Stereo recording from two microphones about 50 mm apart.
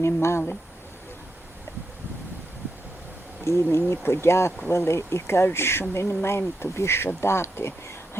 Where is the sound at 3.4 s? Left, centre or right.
Left.